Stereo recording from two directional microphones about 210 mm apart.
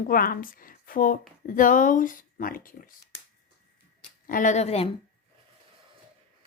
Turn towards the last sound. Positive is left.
turn(degrees=30)  # may be behind; listen again after turning